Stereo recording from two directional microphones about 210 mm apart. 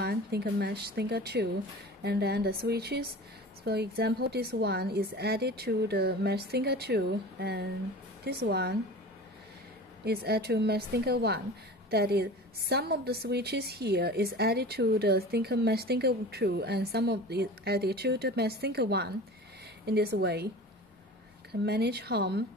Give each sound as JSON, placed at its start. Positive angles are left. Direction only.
{"t": 0.0, "sound": "a woman's voice", "side_deg": -50}
{"t": 10.0, "sound": "a woman's voice", "side_deg": -50}
{"t": 21.5, "sound": "a woman's voice", "side_deg": -50}